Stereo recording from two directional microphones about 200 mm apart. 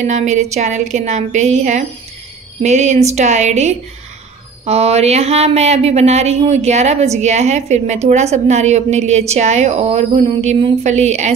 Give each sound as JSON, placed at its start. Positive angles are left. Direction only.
{"t": 0.0, "sound": "speech", "side_deg": -35}